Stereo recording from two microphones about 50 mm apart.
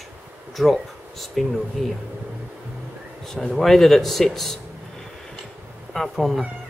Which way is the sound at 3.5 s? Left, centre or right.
Centre.